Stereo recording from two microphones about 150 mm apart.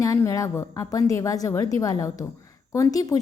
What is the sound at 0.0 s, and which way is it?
A woman's voice, 20° left (ahead or behind).